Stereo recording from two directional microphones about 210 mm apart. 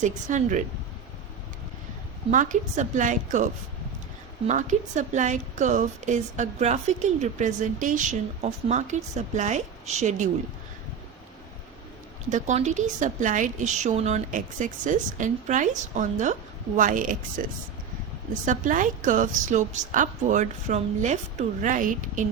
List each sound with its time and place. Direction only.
0.0 s a woman's voice: 35° right (ahead or behind)
2.3 s a woman's voice: 35° right (ahead or behind)
12.3 s a woman's voice: 35° right (ahead or behind)
18.4 s a woman's voice: 40° right (ahead or behind)